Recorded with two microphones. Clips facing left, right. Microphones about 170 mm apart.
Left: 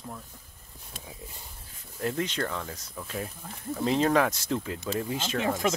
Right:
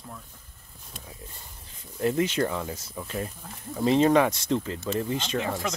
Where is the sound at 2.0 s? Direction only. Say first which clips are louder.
Right 5 dB; 5° right (ahead or behind).